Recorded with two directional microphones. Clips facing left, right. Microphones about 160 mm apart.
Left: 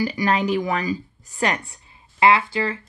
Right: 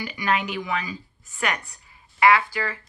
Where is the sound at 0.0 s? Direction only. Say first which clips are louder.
Left 5 dB; 35° left (ahead or behind).